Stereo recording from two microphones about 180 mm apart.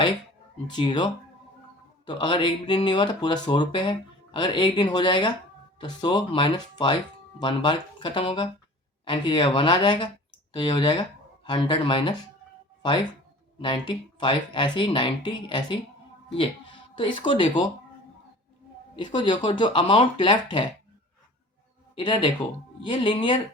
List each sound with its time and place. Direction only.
0.8 s speech: 25° left (ahead or behind)
13.6 s speech: 25° left (ahead or behind)
16.9 s speech: 25° left (ahead or behind)
18.9 s speech: 25° left (ahead or behind)
21.9 s speech: 25° left (ahead or behind)